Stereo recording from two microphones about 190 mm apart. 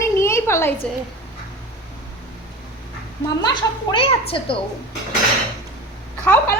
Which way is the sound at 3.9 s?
30° left (ahead or behind).